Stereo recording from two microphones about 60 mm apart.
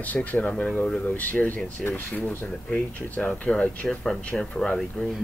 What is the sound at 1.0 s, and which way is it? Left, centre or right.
Speech, left.